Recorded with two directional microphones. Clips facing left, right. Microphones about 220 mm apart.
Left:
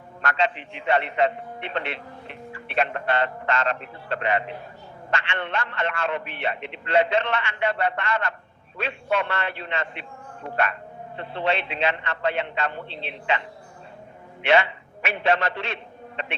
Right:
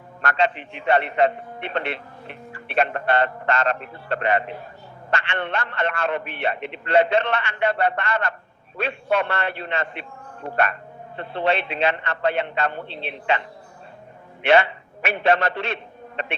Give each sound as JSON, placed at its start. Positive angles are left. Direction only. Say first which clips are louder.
{"t": 0.2, "sound": "a man's voice", "louder": "right 3 dB", "side_deg": -60}
{"t": 11.2, "sound": "a man's voice", "louder": "right 3 dB", "side_deg": -55}
{"t": 14.4, "sound": "a man's voice", "louder": "right 3 dB", "side_deg": -55}